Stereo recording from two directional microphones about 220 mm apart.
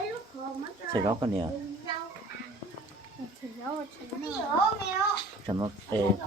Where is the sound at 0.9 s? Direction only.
20° right (ahead or behind).